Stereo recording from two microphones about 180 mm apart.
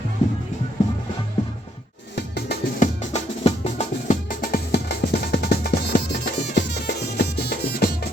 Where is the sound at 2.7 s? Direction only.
40° left (ahead or behind); by 7.9 s 60° left (ahead or behind).